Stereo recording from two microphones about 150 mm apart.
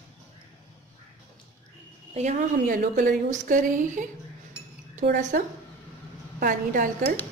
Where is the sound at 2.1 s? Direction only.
50° right (ahead or behind).